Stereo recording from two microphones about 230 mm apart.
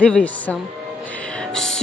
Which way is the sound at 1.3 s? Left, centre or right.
Centre.